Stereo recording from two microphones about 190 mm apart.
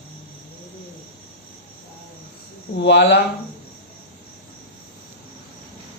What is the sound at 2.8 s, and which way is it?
Speech, 65° left (ahead or behind).